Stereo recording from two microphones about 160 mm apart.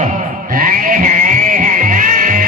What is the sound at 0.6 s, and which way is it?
Music, 60° right (ahead or behind).